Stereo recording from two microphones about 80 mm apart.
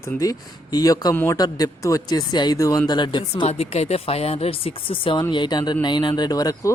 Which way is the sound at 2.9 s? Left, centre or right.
Left.